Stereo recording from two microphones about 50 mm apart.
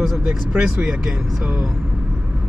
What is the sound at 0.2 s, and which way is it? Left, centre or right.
Speech, centre.